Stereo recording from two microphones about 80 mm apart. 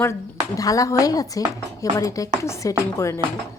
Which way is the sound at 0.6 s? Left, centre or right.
Left.